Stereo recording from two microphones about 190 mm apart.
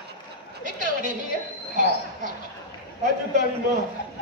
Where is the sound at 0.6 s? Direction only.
45° right (ahead or behind).